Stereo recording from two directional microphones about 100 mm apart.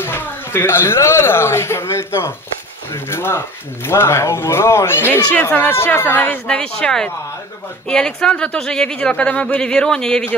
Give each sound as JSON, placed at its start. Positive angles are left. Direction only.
{"t": 0.0, "sound": "speech", "side_deg": 25}